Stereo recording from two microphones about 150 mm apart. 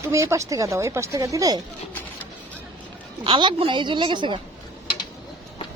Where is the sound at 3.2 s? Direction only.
35° right (ahead or behind).